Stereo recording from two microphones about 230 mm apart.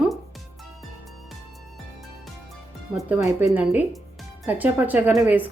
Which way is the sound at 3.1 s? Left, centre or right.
Centre.